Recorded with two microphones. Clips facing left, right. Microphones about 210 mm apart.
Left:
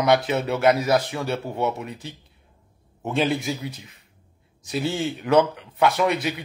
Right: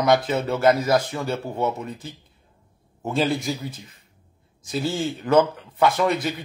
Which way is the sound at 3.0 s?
Centre (ahead or behind).